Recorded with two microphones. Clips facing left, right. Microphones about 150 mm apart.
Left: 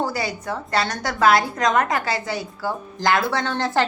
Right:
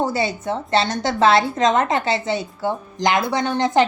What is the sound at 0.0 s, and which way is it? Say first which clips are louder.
A woman's voice: right 4 dB; 25° right (ahead or behind).